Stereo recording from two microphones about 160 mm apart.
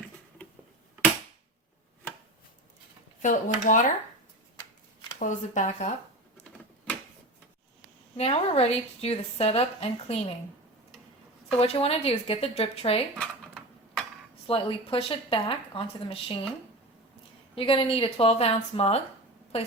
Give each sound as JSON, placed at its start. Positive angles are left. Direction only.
{"t": 3.2, "sound": "speech", "side_deg": 55}
{"t": 5.2, "sound": "speech", "side_deg": 50}
{"t": 8.1, "sound": "a woman's voice", "side_deg": 40}
{"t": 11.5, "sound": "a woman's voice", "side_deg": 40}
{"t": 13.1, "sound": "a sound", "side_deg": 5}
{"t": 14.4, "sound": "a woman's voice", "side_deg": 35}
{"t": 17.5, "sound": "a woman's voice", "side_deg": 35}